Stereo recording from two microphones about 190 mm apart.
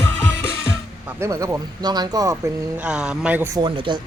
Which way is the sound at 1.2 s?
15° right (ahead or behind).